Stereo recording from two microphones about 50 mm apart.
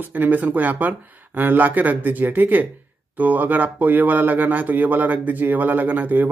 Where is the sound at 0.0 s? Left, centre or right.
Right.